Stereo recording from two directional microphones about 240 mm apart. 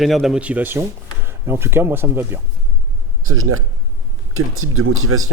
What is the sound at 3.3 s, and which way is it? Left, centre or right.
Speech, right.